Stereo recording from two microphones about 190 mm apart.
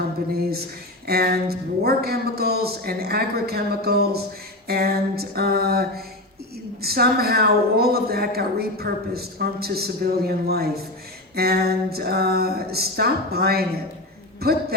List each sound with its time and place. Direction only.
1.0 s a woman's voice: 55° right (ahead or behind)
4.7 s a sound: 55° right (ahead or behind)
6.8 s a woman's voice: 55° right (ahead or behind)